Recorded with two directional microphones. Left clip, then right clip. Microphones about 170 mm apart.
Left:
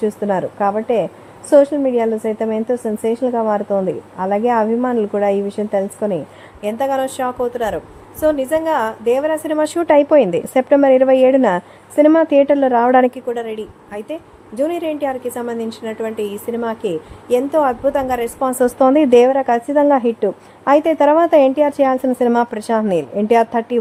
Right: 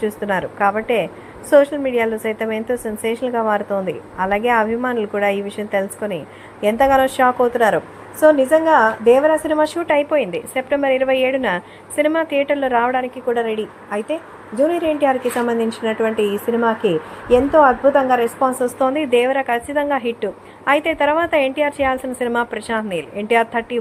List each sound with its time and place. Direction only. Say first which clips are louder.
0.0 s a woman's voice: left 2 dB; 30° left (ahead or behind)
6.6 s a woman's voice: right 4 dB; 5° right (ahead or behind)
9.5 s a woman's voice: even; 20° left (ahead or behind)
9.8 s speech: left 6 dB; 45° left (ahead or behind)
13.2 s a woman's voice: right 3 dB; centre (ahead or behind)
18.6 s speech: left 6 dB; 40° left (ahead or behind)